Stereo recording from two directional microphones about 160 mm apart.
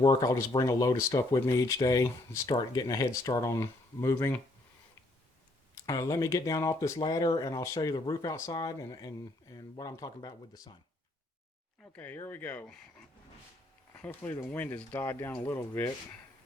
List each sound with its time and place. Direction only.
0.0 s speech: 25° left (ahead or behind)
5.7 s speech: 20° left (ahead or behind)
11.9 s speech: 10° left (ahead or behind)
13.9 s speech: 10° left (ahead or behind)